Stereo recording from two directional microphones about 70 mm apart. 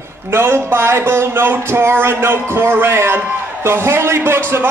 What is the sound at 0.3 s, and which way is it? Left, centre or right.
A man's voice, right.